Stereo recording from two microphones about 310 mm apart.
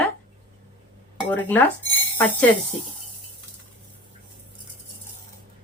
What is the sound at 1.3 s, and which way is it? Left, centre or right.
Speech, centre.